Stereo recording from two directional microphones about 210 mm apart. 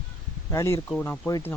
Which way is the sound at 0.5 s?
10° left (ahead or behind).